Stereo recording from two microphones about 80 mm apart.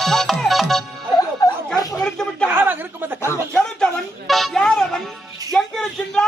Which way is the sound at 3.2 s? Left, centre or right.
Left.